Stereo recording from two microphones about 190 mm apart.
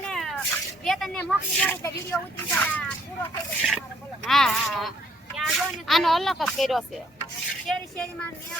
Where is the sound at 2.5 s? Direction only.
5° left (ahead or behind).